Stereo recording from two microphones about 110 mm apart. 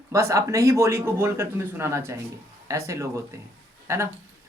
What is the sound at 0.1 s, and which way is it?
A woman's voice, 25° right (ahead or behind).